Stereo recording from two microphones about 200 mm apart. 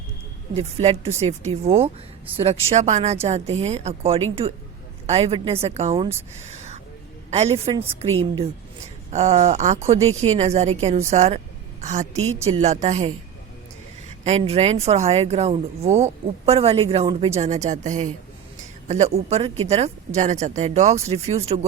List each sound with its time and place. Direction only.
0.5 s a woman's voice: 30° right (ahead or behind)
6.4 s whispering: 35° right (ahead or behind)
7.3 s a woman's voice: 30° right (ahead or behind)
9.0 s a woman's voice: 35° right (ahead or behind)
14.3 s speech: 30° right (ahead or behind)